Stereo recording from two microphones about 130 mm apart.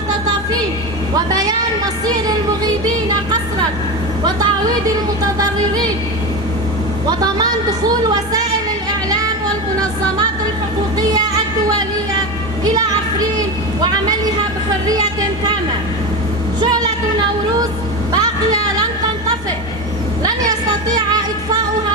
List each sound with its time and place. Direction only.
1.1 s a woman's voice: 30° right (ahead or behind)
4.2 s a woman's voice: 30° right (ahead or behind)
7.1 s a woman's voice: 30° right (ahead or behind)
12.6 s music: 30° right (ahead or behind)
16.6 s vehicle: 30° right (ahead or behind)
18.1 s speech: 30° right (ahead or behind)
20.5 s a woman's voice: 30° right (ahead or behind)